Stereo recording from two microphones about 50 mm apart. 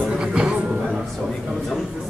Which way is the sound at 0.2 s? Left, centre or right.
Centre.